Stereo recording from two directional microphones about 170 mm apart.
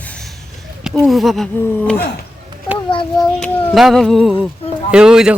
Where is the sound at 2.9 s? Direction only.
30° left (ahead or behind).